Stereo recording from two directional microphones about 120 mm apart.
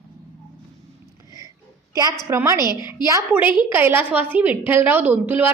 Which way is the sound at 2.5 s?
35° left (ahead or behind).